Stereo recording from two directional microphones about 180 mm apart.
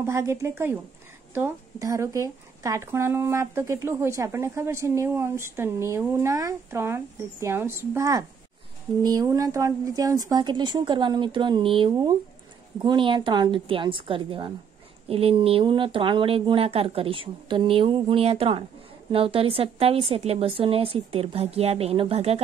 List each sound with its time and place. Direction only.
0.0 s speech: 15° right (ahead or behind); by 22.4 s 35° right (ahead or behind)